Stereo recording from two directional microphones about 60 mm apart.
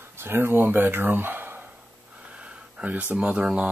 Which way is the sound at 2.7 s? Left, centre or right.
Right.